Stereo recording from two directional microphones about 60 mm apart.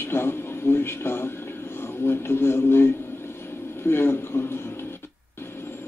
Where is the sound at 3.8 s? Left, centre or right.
Left.